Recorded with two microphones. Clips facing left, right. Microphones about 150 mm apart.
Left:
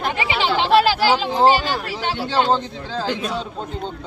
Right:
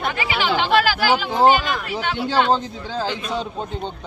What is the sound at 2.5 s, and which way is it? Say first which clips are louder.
Speech: even; 10° right (ahead or behind).